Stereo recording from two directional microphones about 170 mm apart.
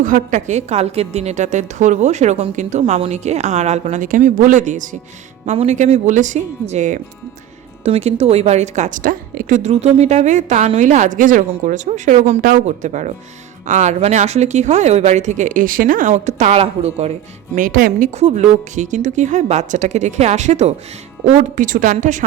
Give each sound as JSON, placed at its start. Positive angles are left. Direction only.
{"t": 0.0, "sound": "a woman's voice", "side_deg": -50}
{"t": 12.4, "sound": "a woman's voice", "side_deg": -55}